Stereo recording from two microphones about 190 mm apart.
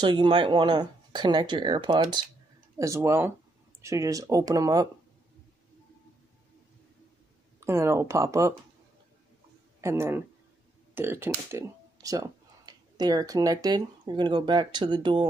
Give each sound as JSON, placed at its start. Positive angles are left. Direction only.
{"t": 0.0, "sound": "speech", "side_deg": -25}
{"t": 7.6, "sound": "speech", "side_deg": -15}
{"t": 9.8, "sound": "speech", "side_deg": -15}